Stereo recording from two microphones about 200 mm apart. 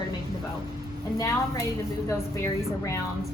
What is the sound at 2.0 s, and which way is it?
Speech, 15° left (ahead or behind).